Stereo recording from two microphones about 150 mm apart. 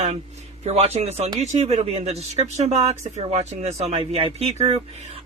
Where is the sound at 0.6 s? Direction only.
45° right (ahead or behind).